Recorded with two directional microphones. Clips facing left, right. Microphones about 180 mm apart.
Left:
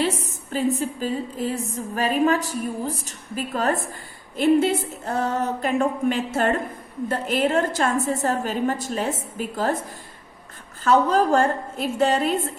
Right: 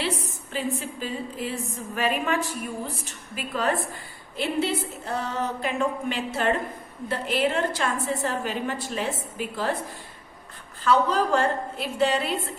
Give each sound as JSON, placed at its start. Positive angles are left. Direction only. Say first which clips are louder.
{"t": 0.0, "sound": "a woman's voice", "louder": "left 5 dB", "side_deg": 45}
{"t": 10.8, "sound": "a woman's voice", "louder": "left 4 dB", "side_deg": 45}